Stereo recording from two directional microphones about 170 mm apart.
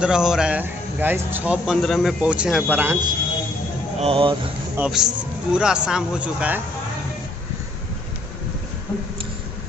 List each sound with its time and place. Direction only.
0.0 s speech: 5° right (ahead or behind)
4.0 s speech: 30° right (ahead or behind)
4.7 s speech: 5° right (ahead or behind)